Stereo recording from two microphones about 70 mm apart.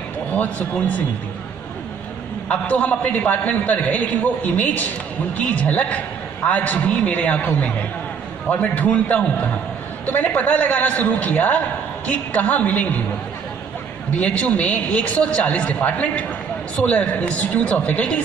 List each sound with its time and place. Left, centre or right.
0.4 s a man's voice: left
2.4 s a man's voice: centre
14.1 s a man's voice: centre